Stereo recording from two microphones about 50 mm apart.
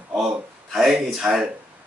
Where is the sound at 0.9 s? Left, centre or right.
Centre.